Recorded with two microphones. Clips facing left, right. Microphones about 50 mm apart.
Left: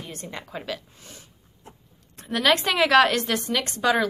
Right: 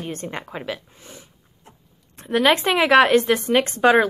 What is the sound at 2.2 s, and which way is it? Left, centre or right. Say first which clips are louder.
A woman's voice: right 4 dB; right.